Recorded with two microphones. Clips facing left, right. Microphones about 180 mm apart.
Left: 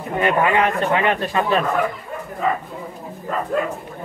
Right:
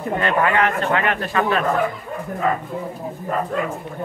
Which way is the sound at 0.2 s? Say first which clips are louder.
Left 2 dB; 15° left (ahead or behind).